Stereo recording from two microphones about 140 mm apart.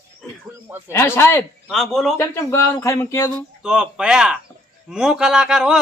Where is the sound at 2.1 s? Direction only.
20° left (ahead or behind).